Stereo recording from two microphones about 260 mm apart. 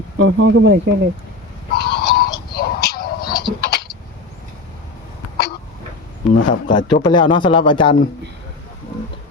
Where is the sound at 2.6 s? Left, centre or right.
Left.